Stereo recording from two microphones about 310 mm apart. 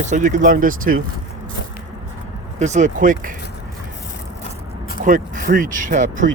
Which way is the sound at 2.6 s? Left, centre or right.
Right.